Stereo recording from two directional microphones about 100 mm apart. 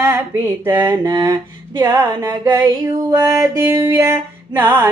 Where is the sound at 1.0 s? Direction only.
35° right (ahead or behind).